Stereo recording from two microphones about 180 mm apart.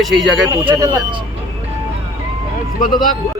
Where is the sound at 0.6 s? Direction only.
30° right (ahead or behind).